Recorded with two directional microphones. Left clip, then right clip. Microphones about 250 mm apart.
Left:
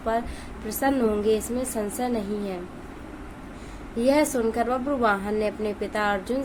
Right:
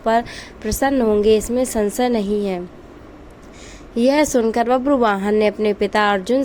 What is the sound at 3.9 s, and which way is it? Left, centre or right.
A woman's voice, right.